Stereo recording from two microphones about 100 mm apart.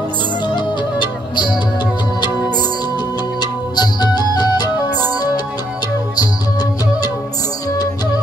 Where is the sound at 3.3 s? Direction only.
45° left (ahead or behind).